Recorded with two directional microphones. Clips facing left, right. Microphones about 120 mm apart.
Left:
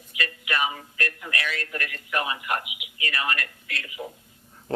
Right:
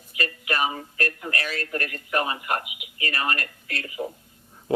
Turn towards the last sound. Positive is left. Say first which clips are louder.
# right 4 dB
turn(degrees=-35)  # may be behind; listen again after turning